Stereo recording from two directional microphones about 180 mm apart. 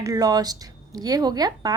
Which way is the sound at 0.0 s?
20° right (ahead or behind).